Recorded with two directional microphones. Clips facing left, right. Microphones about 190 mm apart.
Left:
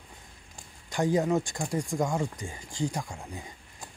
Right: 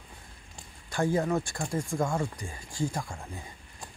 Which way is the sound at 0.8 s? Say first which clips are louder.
Left 2 dB; 20° left (ahead or behind).